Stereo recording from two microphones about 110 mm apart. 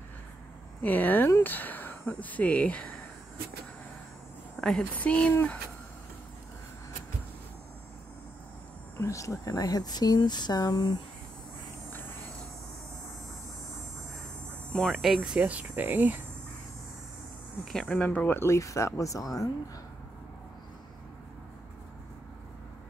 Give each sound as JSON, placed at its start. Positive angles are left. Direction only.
{"t": 0.8, "sound": "speech", "side_deg": 15}
{"t": 4.6, "sound": "speech", "side_deg": 10}
{"t": 8.9, "sound": "speech", "side_deg": 30}
{"t": 14.7, "sound": "speech", "side_deg": 5}
{"t": 17.6, "sound": "speech", "side_deg": 5}